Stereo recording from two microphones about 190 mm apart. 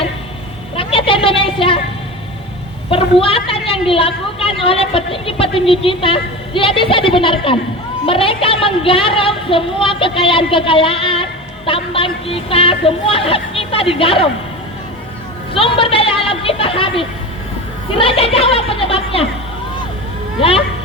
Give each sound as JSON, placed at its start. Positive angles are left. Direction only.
{"t": 0.8, "sound": "a sound", "side_deg": 30}
{"t": 2.9, "sound": "a woman's voice", "side_deg": 30}
{"t": 15.5, "sound": "speech", "side_deg": 30}